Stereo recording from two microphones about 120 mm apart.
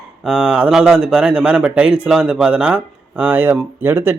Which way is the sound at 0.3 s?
5° right (ahead or behind).